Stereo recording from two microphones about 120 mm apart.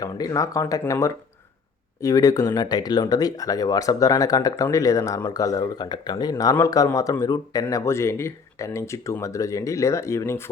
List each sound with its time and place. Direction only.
0.0 s speech: 30° left (ahead or behind)